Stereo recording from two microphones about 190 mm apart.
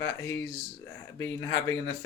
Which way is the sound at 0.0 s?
15° left (ahead or behind).